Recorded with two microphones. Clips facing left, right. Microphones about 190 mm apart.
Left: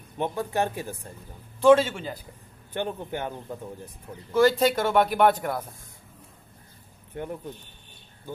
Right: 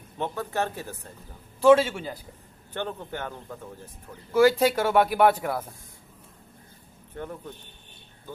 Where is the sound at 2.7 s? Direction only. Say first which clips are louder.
Left 2 dB; 15° left (ahead or behind).